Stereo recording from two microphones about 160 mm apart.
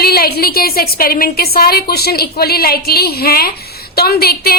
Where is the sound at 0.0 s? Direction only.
75° left (ahead or behind).